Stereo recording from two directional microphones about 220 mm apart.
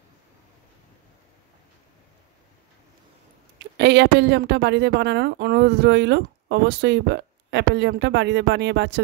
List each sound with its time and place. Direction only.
3.5 s a woman's voice: 50° right (ahead or behind)